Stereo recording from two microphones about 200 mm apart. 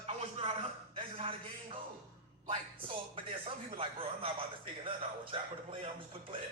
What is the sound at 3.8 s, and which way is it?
Speech, 25° right (ahead or behind).